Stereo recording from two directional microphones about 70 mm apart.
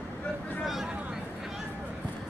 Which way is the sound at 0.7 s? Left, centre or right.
Centre.